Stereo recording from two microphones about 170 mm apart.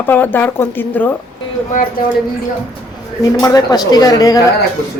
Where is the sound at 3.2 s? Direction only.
20° left (ahead or behind).